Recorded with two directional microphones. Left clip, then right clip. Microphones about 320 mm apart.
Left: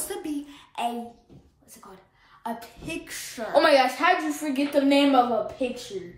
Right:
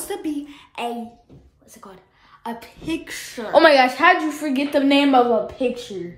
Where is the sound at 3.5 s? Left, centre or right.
Right.